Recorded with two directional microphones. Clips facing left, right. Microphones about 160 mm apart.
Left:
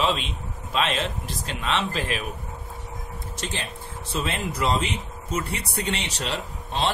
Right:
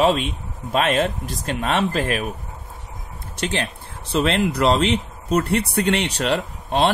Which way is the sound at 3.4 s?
70° right (ahead or behind).